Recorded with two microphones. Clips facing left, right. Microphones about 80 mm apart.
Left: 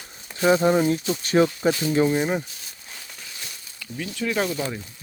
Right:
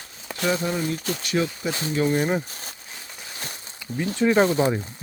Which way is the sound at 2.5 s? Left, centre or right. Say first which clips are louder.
Right 4 dB; right.